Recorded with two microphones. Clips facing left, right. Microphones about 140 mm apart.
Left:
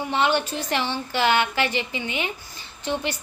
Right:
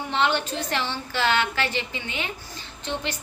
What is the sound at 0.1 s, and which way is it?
A woman's voice, 10° left (ahead or behind).